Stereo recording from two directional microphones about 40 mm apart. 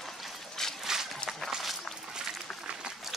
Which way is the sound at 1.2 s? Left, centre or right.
Left.